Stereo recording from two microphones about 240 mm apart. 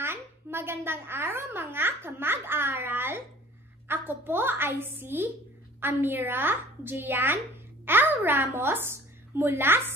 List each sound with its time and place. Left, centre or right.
0.0 s a child's voice: centre